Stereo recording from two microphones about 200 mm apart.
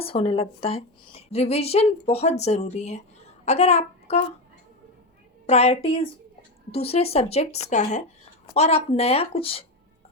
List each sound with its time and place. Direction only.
0.0 s a woman's voice: 25° left (ahead or behind)
5.5 s a woman's voice: 30° left (ahead or behind)